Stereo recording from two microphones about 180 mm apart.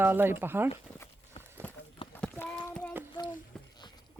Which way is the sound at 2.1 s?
10° left (ahead or behind).